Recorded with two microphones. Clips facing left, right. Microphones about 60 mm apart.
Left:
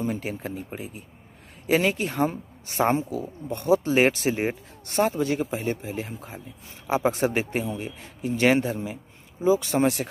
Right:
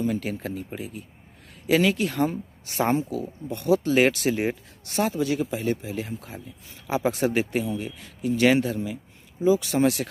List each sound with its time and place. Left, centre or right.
0.0 s speech: left
4.8 s speech: left